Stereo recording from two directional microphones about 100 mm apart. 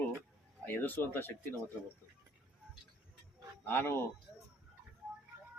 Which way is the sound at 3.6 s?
20° left (ahead or behind).